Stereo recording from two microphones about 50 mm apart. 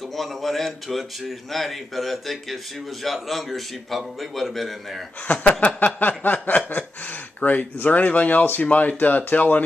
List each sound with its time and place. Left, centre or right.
0.1 s speech: centre
5.3 s chuckle: left
5.9 s a sound: left
7.3 s speech: left